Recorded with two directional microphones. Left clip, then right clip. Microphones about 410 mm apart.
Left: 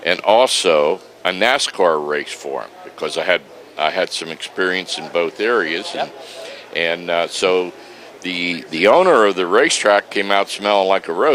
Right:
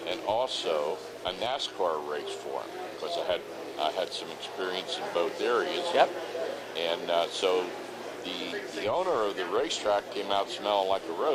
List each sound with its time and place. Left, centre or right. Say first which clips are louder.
0.0 s speech: left 16 dB; left